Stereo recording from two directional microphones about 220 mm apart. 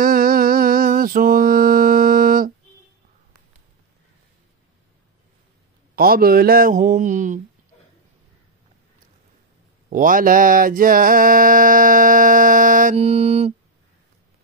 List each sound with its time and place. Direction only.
0.0 s mantra: 40° right (ahead or behind)
5.9 s mantra: 45° right (ahead or behind)
9.8 s mantra: 40° right (ahead or behind)